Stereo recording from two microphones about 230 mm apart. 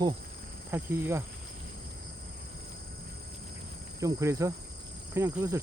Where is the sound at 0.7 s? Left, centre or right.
Centre.